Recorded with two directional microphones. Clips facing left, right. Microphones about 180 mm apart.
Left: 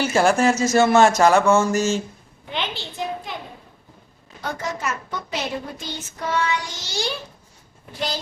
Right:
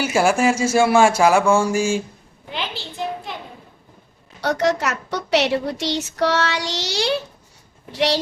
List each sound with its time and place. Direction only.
0.0 s speech: 10° right (ahead or behind)
4.4 s a woman's voice: 80° right